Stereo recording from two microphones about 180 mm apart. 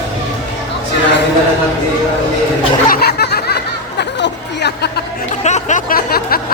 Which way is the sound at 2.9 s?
60° left (ahead or behind).